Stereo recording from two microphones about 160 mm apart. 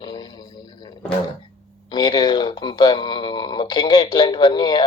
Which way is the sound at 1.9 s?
30° left (ahead or behind).